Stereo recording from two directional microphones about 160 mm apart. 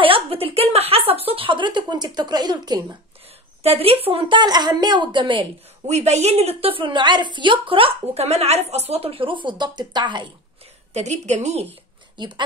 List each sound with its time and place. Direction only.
0.0 s a sound: 35° right (ahead or behind)
3.6 s speech: 40° right (ahead or behind)
5.9 s a woman's voice: 45° right (ahead or behind); by 10.2 s 30° right (ahead or behind)
10.9 s a woman's voice: 45° right (ahead or behind)
12.2 s speech: 30° right (ahead or behind)